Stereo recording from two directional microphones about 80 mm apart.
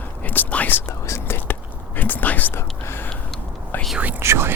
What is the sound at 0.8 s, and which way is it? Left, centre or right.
Whispering, left.